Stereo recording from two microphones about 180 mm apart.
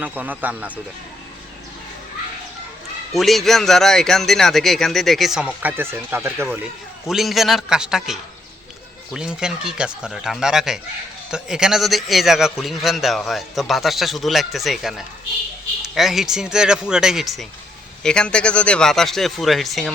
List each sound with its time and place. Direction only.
0.0 s speech: 10° right (ahead or behind)
3.1 s a man's voice: centre (ahead or behind)
5.6 s speech: 10° right (ahead or behind)
7.1 s a man's voice: centre (ahead or behind)